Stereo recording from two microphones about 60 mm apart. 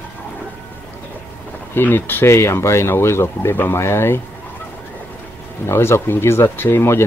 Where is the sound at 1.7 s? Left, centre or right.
Left.